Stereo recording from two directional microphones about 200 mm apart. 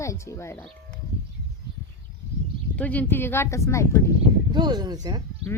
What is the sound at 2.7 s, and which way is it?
Speech, 5° left (ahead or behind).